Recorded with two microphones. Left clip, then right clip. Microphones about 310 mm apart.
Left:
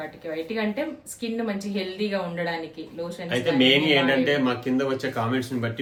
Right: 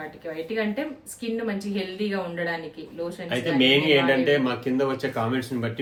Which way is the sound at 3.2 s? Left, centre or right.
Centre.